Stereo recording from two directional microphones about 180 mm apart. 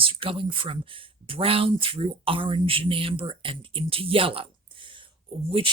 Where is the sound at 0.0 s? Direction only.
30° right (ahead or behind).